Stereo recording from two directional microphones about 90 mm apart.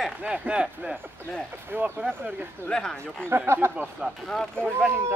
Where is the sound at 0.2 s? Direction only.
10° right (ahead or behind).